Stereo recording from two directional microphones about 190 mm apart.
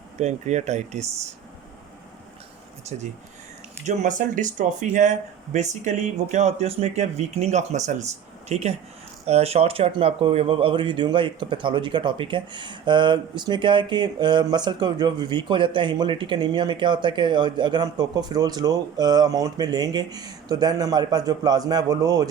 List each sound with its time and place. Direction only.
0.2 s speech: 40° right (ahead or behind)
2.9 s speech: 35° right (ahead or behind); by 22.3 s 20° right (ahead or behind)